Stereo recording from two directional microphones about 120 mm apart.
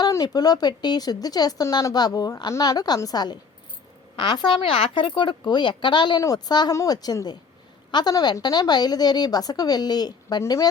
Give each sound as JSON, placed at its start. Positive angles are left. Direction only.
{"t": 0.0, "sound": "speech", "side_deg": 30}